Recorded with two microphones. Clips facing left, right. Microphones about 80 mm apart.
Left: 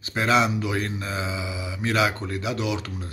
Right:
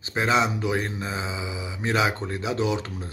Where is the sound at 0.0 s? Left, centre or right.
Right.